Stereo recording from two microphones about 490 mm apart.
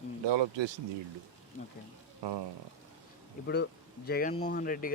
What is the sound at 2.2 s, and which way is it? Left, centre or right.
Speech, right.